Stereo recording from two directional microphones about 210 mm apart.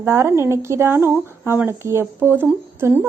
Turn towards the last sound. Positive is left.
turn(degrees=-10)  # may be behind; listen again after turning